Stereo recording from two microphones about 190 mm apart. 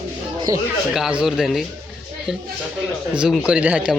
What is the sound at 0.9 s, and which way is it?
Speech, 5° right (ahead or behind).